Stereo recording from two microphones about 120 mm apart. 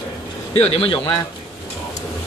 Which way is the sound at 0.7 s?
50° left (ahead or behind).